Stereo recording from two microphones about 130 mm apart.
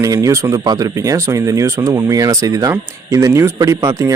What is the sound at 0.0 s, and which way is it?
Speech, 25° right (ahead or behind).